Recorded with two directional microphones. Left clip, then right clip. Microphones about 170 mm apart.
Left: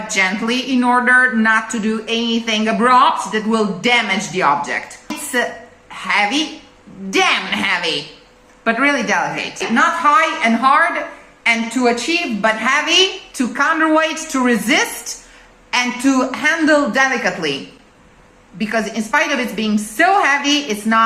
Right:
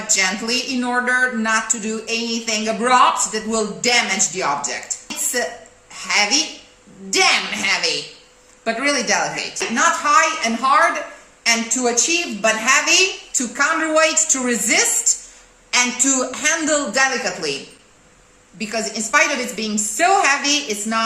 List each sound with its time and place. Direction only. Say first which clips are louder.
0.1 s a woman's voice: left 2 dB; 10° right (ahead or behind)
6.1 s a woman's voice: left 2 dB; 10° right (ahead or behind)
12.4 s a woman's voice: even; 10° right (ahead or behind)
18.6 s a woman's voice: left 4 dB; 10° right (ahead or behind)